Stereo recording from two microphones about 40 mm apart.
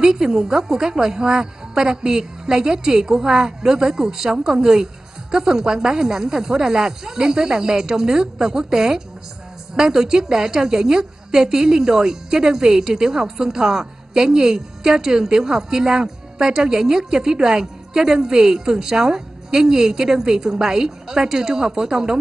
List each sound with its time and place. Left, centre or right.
0.0 s a woman's voice: centre